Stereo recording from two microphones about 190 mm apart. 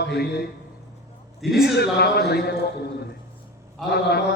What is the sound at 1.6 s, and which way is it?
Mantra, 60° left (ahead or behind).